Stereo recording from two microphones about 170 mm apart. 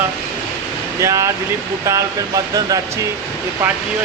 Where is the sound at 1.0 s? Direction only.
20° right (ahead or behind).